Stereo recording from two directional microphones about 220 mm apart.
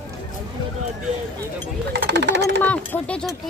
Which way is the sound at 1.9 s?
50° right (ahead or behind).